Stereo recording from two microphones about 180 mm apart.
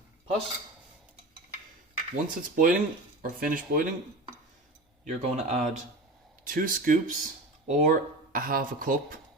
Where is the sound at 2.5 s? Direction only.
50° right (ahead or behind).